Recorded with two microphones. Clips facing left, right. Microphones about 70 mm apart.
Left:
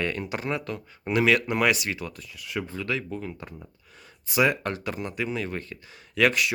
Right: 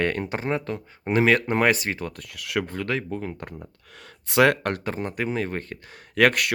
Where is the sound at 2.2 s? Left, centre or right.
Right.